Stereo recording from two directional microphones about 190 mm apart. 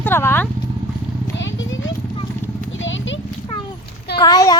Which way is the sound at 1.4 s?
75° left (ahead or behind).